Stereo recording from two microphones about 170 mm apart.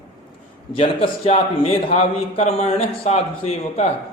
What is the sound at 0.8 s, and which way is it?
A man's voice, 35° left (ahead or behind).